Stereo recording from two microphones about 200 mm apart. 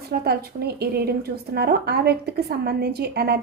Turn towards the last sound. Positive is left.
turn(degrees=-55)  # may be behind; listen again after turning